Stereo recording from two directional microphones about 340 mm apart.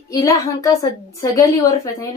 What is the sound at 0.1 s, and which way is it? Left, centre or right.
A woman's voice, centre.